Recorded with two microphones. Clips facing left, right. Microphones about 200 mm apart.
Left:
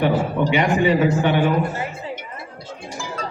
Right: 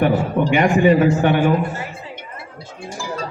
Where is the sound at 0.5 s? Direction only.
50° right (ahead or behind).